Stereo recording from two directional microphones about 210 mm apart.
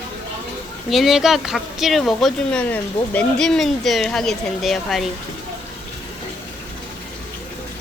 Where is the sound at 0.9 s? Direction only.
Centre (ahead or behind).